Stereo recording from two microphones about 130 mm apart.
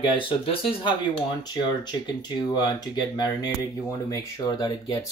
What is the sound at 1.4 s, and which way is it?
Speech, 35° left (ahead or behind).